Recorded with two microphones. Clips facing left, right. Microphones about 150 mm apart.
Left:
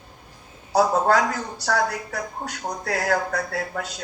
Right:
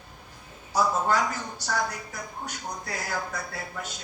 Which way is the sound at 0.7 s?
65° left (ahead or behind).